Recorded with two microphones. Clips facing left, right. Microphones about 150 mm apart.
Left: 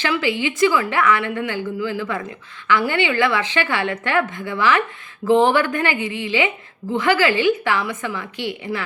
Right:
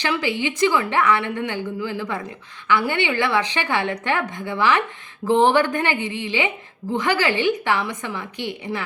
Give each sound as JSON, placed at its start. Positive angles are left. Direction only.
{"t": 0.0, "sound": "a woman's voice", "side_deg": -15}